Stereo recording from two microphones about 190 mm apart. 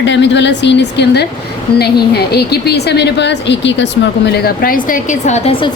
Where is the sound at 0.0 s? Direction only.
70° left (ahead or behind).